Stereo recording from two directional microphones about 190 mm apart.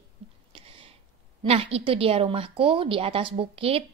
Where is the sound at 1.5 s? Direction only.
30° right (ahead or behind).